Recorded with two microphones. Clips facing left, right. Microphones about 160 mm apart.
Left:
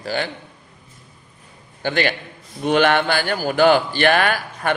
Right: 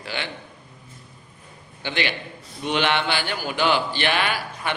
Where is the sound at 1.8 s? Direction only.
45° left (ahead or behind).